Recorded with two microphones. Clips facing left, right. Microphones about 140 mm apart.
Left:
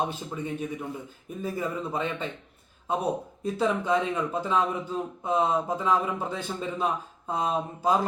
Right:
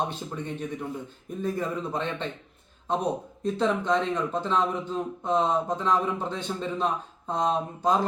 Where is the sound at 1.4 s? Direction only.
5° left (ahead or behind).